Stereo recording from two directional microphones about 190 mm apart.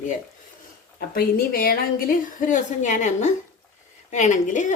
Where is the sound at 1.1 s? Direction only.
50° left (ahead or behind).